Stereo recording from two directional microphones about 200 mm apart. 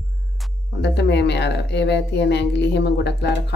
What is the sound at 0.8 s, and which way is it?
Speech, 60° left (ahead or behind).